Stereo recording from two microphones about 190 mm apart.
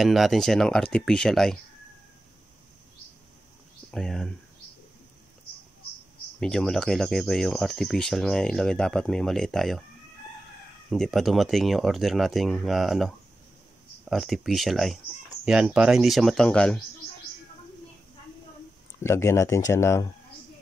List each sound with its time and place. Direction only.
0.0 s speech: centre (ahead or behind)
3.9 s speech: 5° left (ahead or behind)
6.4 s speech: 5° left (ahead or behind)
10.9 s speech: centre (ahead or behind)
19.0 s speech: 15° left (ahead or behind)